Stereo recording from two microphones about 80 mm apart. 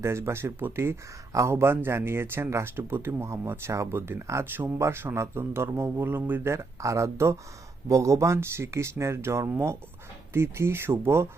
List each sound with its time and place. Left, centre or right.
0.0 s speech: right